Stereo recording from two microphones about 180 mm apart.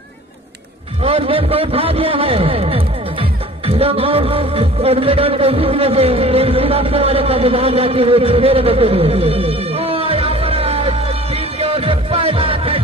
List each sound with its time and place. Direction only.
1.0 s a man's voice: 30° right (ahead or behind)